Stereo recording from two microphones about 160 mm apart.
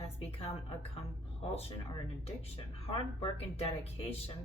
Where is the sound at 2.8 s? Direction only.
40° left (ahead or behind).